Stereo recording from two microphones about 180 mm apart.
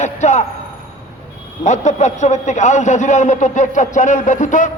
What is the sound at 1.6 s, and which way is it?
A man's voice, 40° left (ahead or behind).